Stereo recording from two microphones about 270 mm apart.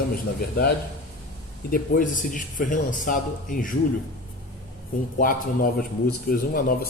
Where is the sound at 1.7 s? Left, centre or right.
Left.